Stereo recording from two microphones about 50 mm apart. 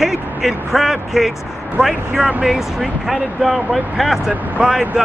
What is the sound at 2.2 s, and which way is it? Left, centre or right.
Speech, right.